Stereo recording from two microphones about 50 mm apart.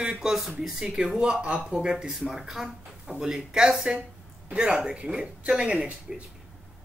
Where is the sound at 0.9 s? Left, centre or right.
Centre.